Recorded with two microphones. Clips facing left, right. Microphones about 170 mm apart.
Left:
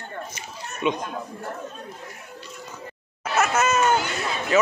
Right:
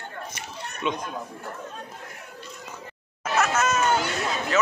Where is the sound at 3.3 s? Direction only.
10° left (ahead or behind).